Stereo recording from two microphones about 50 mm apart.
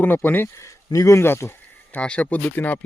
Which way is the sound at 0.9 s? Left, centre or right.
Left.